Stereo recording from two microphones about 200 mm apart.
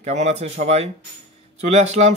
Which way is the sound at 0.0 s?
35° right (ahead or behind).